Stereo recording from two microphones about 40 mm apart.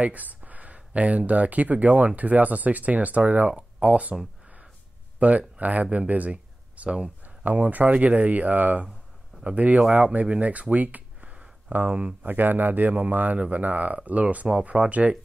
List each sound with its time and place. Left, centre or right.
0.0 s speech: right
5.2 s speech: right
10.4 s a sound: right
11.7 s speech: right
12.3 s speech: right